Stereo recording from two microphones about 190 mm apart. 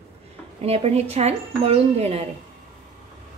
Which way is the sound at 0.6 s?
30° right (ahead or behind).